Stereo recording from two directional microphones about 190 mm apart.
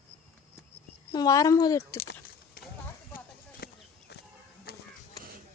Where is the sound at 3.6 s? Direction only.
55° left (ahead or behind).